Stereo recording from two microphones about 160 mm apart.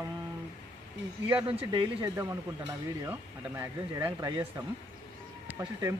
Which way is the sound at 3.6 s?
20° right (ahead or behind).